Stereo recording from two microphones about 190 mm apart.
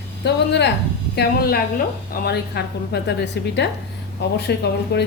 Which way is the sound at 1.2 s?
55° left (ahead or behind).